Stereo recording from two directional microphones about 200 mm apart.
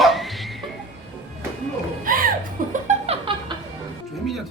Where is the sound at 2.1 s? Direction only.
40° right (ahead or behind).